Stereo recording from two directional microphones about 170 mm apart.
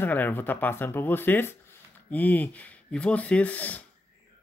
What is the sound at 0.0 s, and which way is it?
Speech, 10° left (ahead or behind).